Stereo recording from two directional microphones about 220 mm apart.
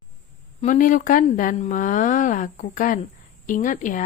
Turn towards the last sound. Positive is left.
turn(degrees=35)  # may be behind; listen again after turning